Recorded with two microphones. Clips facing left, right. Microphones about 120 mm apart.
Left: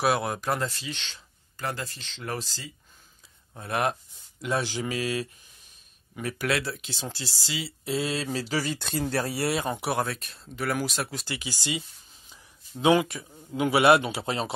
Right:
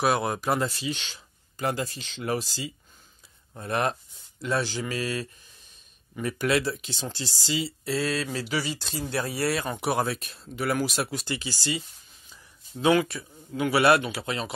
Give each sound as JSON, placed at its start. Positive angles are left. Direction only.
{"t": 0.0, "sound": "speech", "side_deg": 0}
{"t": 3.5, "sound": "speech", "side_deg": 5}
{"t": 6.2, "sound": "speech", "side_deg": 0}
{"t": 7.8, "sound": "speech", "side_deg": 20}
{"t": 9.2, "sound": "speech", "side_deg": 30}
{"t": 9.8, "sound": "speech", "side_deg": 0}
{"t": 11.3, "sound": "speech", "side_deg": 15}
{"t": 12.8, "sound": "speech", "side_deg": 15}